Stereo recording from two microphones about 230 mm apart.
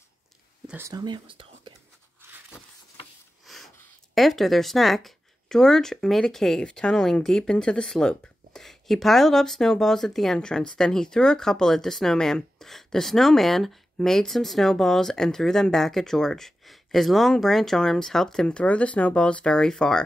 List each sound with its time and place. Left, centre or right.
0.7 s speech: centre
3.4 s speech: centre